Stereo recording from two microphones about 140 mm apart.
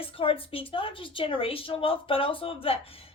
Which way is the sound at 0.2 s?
40° left (ahead or behind).